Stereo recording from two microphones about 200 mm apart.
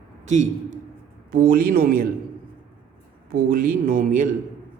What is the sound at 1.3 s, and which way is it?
Speech, 45° right (ahead or behind).